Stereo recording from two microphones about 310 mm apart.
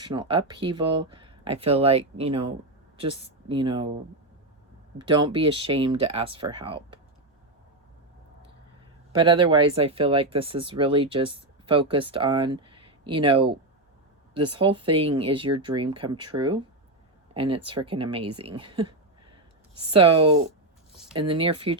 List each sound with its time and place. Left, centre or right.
0.0 s speech: centre
4.9 s speech: centre
9.1 s speech: centre